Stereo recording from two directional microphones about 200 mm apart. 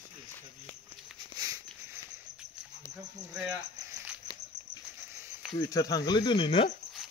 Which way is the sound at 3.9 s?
10° right (ahead or behind).